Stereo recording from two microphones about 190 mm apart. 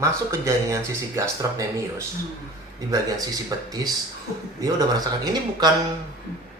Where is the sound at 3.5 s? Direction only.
20° right (ahead or behind).